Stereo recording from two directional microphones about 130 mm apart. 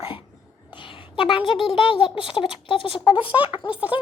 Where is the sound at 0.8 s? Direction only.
40° left (ahead or behind).